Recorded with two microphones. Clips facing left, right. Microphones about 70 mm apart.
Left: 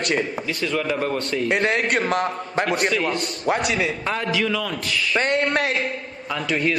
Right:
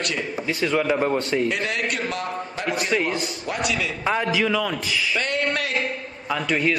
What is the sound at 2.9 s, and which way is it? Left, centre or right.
Speech, centre.